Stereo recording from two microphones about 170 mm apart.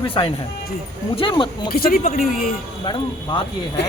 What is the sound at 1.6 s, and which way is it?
Speech, 60° left (ahead or behind).